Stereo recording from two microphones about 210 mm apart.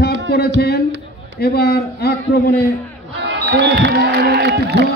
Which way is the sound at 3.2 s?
55° right (ahead or behind).